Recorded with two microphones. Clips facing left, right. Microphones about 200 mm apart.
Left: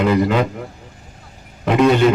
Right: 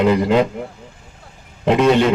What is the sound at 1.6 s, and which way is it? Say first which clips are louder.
Speech: even; 25° right (ahead or behind).